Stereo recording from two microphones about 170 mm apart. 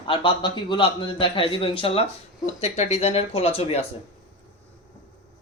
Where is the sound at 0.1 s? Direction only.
30° left (ahead or behind).